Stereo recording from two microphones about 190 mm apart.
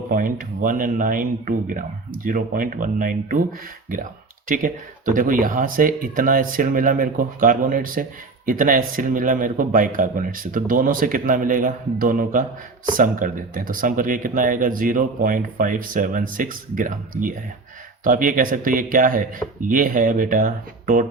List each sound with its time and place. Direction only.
0.1 s speech: 45° right (ahead or behind)
4.4 s speech: 45° right (ahead or behind)